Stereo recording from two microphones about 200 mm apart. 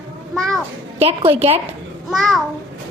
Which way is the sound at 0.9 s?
30° right (ahead or behind).